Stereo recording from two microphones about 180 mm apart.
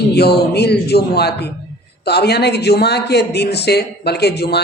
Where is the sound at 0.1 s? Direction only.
60° left (ahead or behind).